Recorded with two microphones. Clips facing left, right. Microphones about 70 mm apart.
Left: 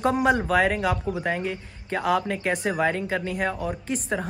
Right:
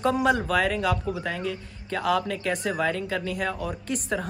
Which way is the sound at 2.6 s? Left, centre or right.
Left.